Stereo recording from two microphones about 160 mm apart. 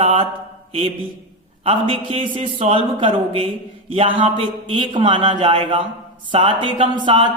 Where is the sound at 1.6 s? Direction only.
35° right (ahead or behind).